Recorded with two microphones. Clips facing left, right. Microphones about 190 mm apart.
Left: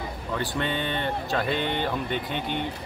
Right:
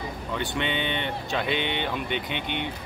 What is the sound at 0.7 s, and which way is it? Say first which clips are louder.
Speech: left 1 dB; 80° right.